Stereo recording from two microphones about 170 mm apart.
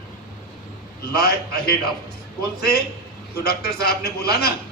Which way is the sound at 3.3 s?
70° left (ahead or behind).